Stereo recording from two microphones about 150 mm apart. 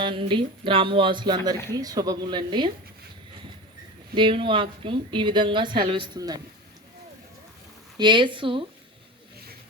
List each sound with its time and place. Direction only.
0.0 s a woman's voice: 30° right (ahead or behind)
4.1 s a woman's voice: 35° right (ahead or behind)
7.9 s a woman's voice: 30° right (ahead or behind)